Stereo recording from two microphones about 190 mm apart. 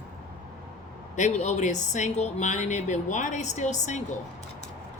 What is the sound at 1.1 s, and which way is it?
Speech, 40° left (ahead or behind).